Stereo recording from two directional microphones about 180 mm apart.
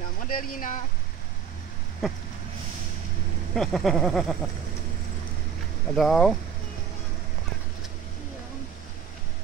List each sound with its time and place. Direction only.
0.3 s speech: 50° left (ahead or behind)
2.0 s speech: centre (ahead or behind)
3.5 s speech: 5° left (ahead or behind)
5.9 s speech: centre (ahead or behind)